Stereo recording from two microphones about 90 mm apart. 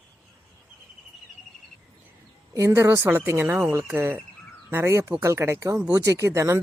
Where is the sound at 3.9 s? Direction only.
20° right (ahead or behind).